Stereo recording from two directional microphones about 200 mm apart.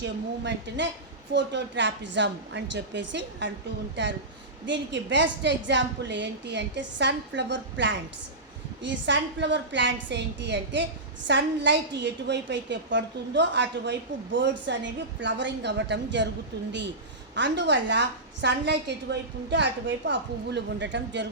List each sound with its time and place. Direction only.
0.0 s a woman's voice: 60° right (ahead or behind)
17.3 s a woman's voice: 60° right (ahead or behind)